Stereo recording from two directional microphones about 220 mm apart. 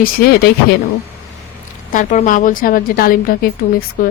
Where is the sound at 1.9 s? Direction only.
35° left (ahead or behind).